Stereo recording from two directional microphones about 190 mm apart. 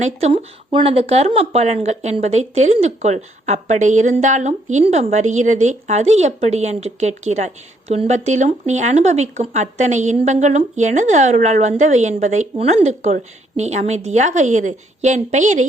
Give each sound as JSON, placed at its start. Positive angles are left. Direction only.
{"t": 0.0, "sound": "speech", "side_deg": -35}